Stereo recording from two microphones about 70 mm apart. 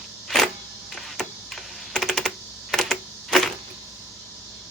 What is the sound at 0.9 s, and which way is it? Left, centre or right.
Typing, centre.